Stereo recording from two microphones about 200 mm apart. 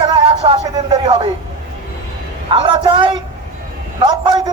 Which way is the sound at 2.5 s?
25° right (ahead or behind).